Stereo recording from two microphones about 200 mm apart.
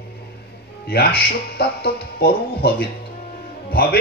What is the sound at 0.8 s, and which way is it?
Speech, 50° left (ahead or behind).